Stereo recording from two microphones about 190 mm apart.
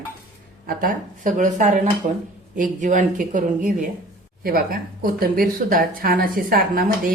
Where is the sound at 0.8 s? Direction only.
45° right (ahead or behind).